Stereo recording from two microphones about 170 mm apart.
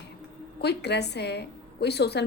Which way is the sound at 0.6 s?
75° left (ahead or behind).